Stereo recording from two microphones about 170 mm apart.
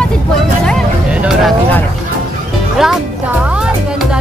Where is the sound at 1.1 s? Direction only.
5° right (ahead or behind).